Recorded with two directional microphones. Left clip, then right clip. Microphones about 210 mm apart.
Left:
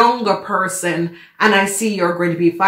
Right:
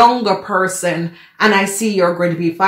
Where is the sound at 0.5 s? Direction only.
30° right (ahead or behind).